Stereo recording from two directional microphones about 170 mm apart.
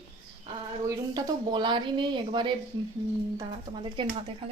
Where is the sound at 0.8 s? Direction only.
25° right (ahead or behind).